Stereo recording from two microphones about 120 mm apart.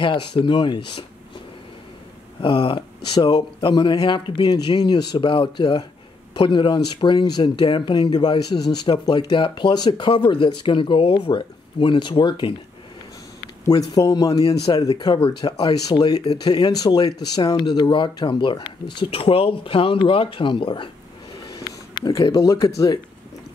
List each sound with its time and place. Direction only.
0.0 s speech: 45° left (ahead or behind)
2.4 s speech: 45° left (ahead or behind)
13.7 s speech: 30° left (ahead or behind)
15.1 s speech: 45° left (ahead or behind)
19.0 s speech: 50° left (ahead or behind)
21.5 s speech: 30° left (ahead or behind)